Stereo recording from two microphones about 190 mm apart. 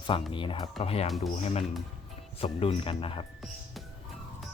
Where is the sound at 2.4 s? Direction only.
30° left (ahead or behind).